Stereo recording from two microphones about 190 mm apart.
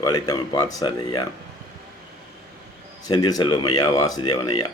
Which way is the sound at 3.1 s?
20° left (ahead or behind).